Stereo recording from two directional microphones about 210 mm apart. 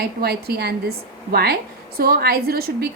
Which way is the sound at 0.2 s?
50° right (ahead or behind).